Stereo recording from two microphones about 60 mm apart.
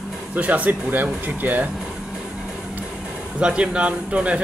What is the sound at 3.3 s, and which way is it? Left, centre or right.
Speech, centre.